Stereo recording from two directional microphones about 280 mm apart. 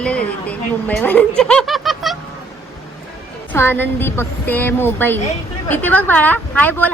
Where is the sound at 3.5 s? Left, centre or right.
Centre.